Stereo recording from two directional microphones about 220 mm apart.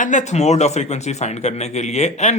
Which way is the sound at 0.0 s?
35° left (ahead or behind).